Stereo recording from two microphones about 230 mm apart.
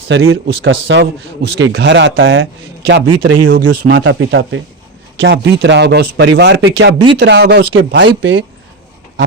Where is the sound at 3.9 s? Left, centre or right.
Right.